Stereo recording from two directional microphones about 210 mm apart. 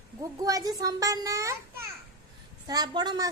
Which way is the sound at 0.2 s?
15° right (ahead or behind).